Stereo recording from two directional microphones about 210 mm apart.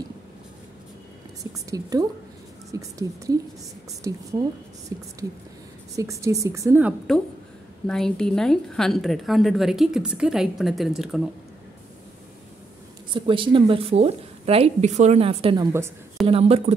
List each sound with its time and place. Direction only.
1.4 s a woman's voice: 15° right (ahead or behind); by 11.2 s centre (ahead or behind)
13.1 s a woman's voice: 25° right (ahead or behind)
16.3 s a woman's voice: 30° right (ahead or behind)